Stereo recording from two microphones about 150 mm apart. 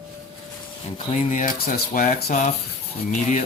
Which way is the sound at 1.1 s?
55° left (ahead or behind).